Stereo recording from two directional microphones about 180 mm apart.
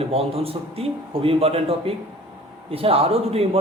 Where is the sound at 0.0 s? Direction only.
35° right (ahead or behind).